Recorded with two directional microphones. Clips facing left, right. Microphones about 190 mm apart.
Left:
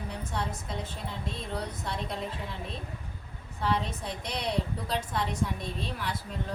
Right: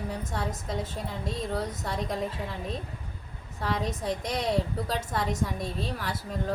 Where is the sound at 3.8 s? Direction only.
40° right (ahead or behind).